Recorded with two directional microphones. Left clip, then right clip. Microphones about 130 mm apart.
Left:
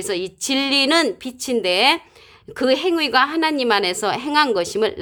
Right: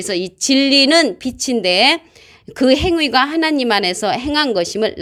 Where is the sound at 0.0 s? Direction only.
25° right (ahead or behind).